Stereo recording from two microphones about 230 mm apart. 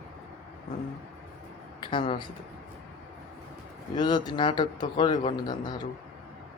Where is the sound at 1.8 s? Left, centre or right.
Left.